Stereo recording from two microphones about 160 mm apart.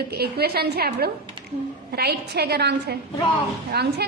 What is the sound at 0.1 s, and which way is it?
A woman's voice, 80° right.